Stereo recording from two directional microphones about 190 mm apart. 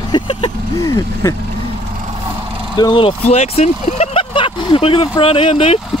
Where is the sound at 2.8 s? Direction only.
25° left (ahead or behind).